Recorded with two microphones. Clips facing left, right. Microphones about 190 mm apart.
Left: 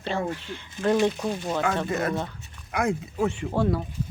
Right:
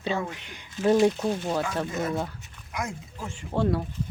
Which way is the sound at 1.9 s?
65° left (ahead or behind).